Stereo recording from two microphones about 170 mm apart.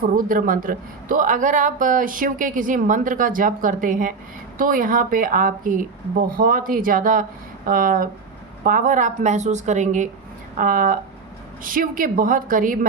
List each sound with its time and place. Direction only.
0.0 s a woman's voice: 55° right (ahead or behind)